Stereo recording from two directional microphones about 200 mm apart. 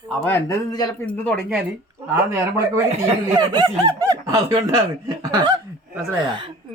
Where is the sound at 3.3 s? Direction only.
20° right (ahead or behind).